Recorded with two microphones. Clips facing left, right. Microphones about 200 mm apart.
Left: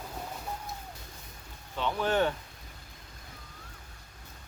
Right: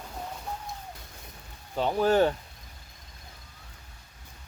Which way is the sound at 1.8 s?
40° right (ahead or behind).